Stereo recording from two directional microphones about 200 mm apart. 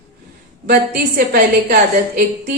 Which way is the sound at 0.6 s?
45° right (ahead or behind).